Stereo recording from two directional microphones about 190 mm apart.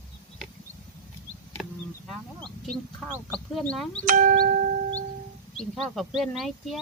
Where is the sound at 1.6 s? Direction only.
Centre (ahead or behind).